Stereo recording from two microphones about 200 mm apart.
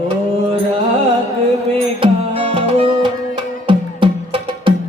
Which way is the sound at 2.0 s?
30° right (ahead or behind).